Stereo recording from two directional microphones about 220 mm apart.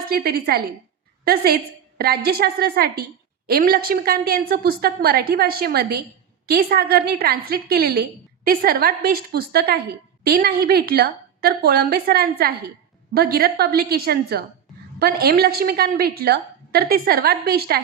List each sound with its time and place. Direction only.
0.1 s a woman's voice: 45° right (ahead or behind)